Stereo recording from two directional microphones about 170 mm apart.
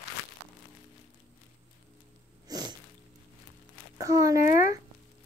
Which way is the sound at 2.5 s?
25° right (ahead or behind).